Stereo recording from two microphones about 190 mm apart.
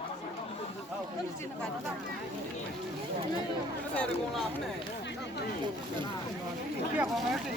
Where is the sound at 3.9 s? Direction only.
5° left (ahead or behind).